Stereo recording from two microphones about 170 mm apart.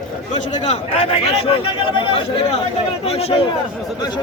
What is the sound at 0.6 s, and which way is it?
Speech, 35° left (ahead or behind).